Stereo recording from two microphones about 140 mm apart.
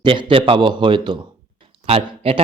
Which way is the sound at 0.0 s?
40° right (ahead or behind).